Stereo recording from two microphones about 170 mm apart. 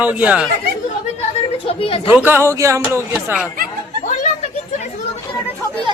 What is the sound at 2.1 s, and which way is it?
Speech, 10° right (ahead or behind).